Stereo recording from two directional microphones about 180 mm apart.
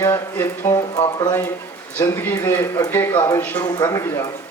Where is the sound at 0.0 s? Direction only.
15° left (ahead or behind).